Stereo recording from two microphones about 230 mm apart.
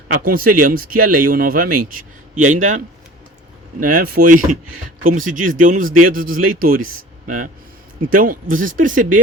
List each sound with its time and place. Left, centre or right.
0.3 s a man's voice: right